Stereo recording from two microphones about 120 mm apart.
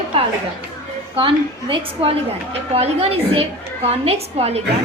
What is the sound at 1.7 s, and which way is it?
A woman's voice, 50° right (ahead or behind).